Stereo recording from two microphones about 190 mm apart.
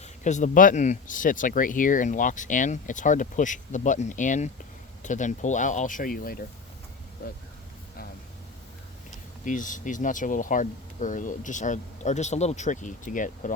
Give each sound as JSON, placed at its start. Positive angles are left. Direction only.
{"t": 0.0, "sound": "speech", "side_deg": 40}
{"t": 9.4, "sound": "speech", "side_deg": 40}